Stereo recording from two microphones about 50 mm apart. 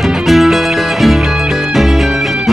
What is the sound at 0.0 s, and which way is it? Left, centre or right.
Music, centre.